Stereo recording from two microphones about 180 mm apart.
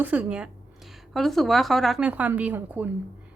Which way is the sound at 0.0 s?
10° right (ahead or behind).